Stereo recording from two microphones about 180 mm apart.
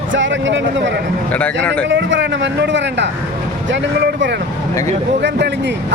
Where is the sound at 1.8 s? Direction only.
90° right.